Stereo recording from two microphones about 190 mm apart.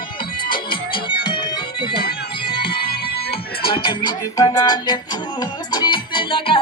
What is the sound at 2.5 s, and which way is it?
Music, 25° left (ahead or behind).